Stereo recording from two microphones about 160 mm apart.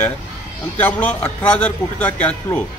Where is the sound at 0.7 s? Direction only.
10° left (ahead or behind).